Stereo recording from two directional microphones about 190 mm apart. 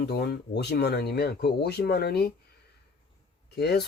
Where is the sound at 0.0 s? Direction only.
60° left (ahead or behind).